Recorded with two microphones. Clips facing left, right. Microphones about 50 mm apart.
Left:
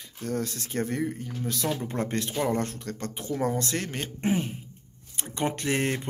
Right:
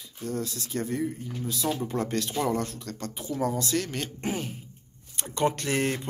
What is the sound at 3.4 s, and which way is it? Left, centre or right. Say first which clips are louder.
Speech: right 1 dB; left.